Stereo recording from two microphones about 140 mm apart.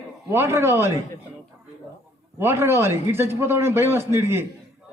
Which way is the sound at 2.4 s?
15° right (ahead or behind).